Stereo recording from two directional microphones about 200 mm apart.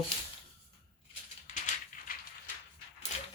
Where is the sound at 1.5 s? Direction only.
40° left (ahead or behind).